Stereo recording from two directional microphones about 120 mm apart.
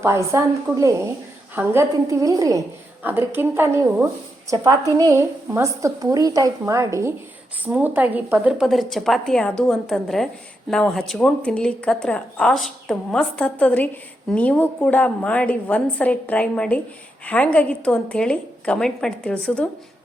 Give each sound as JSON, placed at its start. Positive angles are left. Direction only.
{"t": 0.0, "sound": "a woman's voice", "side_deg": -25}
{"t": 3.0, "sound": "a woman's voice", "side_deg": -15}
{"t": 7.6, "sound": "speech", "side_deg": -15}
{"t": 8.5, "sound": "a woman's voice", "side_deg": 0}